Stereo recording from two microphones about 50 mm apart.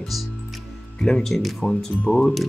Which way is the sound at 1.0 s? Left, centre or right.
Centre.